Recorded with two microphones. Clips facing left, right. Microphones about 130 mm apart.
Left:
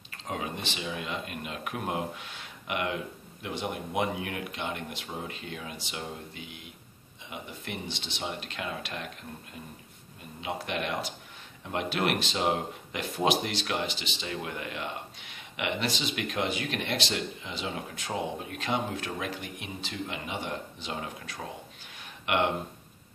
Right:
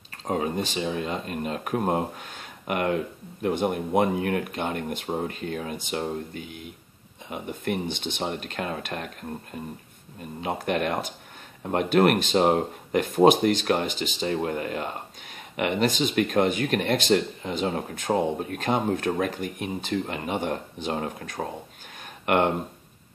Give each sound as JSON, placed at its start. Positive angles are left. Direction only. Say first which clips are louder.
{"t": 0.3, "sound": "speech", "louder": "right 8 dB", "side_deg": -40}